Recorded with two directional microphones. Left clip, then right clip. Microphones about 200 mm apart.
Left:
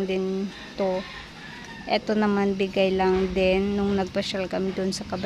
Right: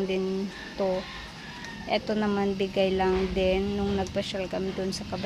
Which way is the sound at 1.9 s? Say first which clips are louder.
Left 4 dB; 20° left (ahead or behind).